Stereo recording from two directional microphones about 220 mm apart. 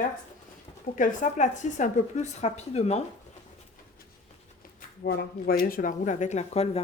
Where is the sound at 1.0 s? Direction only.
35° left (ahead or behind).